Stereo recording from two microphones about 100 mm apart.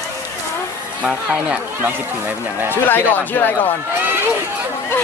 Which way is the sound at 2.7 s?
20° left (ahead or behind).